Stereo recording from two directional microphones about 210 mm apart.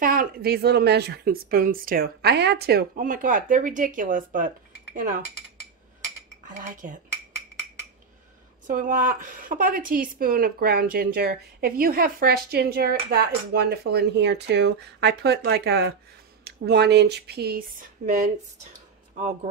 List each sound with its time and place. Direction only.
0.0 s a woman's voice: 40° right (ahead or behind)
6.4 s cutlery: 40° right (ahead or behind)
8.6 s a woman's voice: 40° right (ahead or behind)